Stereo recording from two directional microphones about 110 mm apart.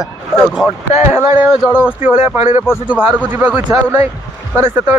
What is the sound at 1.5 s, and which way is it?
Speech, 10° right (ahead or behind).